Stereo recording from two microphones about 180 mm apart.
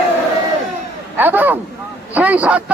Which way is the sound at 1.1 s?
10° right (ahead or behind).